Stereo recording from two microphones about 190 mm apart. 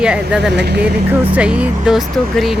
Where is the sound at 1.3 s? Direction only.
5° right (ahead or behind).